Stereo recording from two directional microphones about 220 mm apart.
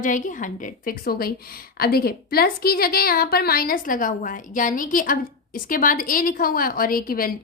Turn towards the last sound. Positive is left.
turn(degrees=40)  # may be behind; listen again after turning